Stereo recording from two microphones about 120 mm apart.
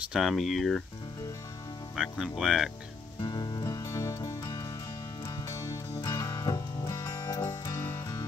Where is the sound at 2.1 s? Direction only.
5° right (ahead or behind).